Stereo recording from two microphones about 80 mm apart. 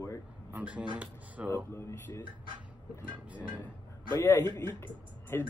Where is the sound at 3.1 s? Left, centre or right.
Centre.